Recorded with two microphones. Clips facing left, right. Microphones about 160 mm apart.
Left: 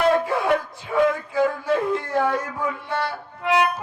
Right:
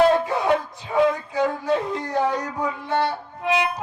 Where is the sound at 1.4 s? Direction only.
20° right (ahead or behind).